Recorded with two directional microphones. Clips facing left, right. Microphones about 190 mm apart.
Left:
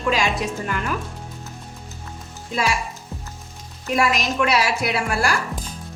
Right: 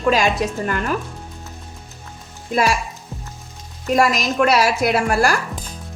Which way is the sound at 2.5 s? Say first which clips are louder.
Right 5 dB; 55° right (ahead or behind).